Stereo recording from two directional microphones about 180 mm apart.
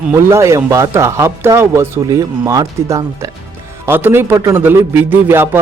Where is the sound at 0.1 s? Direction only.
15° right (ahead or behind).